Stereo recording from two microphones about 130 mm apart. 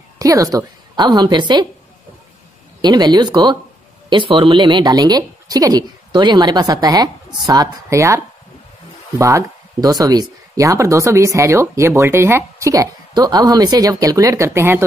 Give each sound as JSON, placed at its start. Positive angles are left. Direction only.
{"t": 0.2, "sound": "a woman's voice", "side_deg": -25}
{"t": 2.8, "sound": "a woman's voice", "side_deg": -35}
{"t": 9.2, "sound": "speech", "side_deg": -25}